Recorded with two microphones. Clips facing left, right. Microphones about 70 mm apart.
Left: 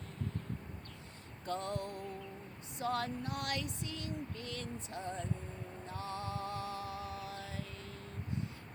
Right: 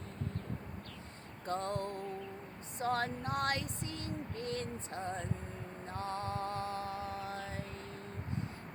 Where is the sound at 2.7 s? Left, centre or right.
Right.